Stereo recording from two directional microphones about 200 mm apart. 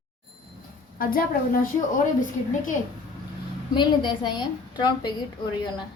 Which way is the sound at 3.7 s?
20° left (ahead or behind).